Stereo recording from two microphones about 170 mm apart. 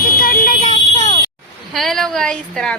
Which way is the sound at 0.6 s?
40° left (ahead or behind).